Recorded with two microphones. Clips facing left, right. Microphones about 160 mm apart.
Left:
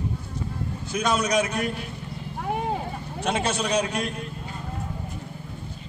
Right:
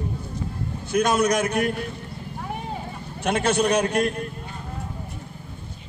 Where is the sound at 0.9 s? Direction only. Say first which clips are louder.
Right 4 dB; 50° right (ahead or behind).